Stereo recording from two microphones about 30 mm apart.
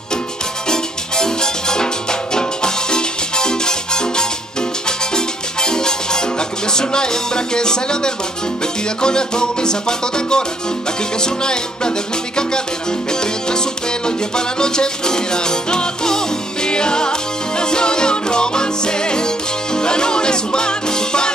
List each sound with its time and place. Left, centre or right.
0.7 s music: left
13.1 s music: left